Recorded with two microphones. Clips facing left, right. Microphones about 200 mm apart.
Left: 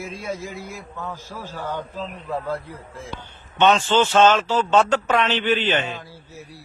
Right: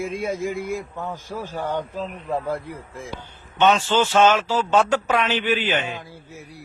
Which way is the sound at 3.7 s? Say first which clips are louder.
Left 2 dB; 10° right (ahead or behind).